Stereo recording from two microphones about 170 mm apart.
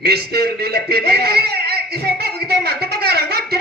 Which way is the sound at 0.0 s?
65° right (ahead or behind).